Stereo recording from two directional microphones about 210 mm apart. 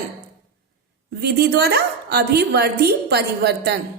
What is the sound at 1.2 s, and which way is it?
A woman's voice, 50° right (ahead or behind).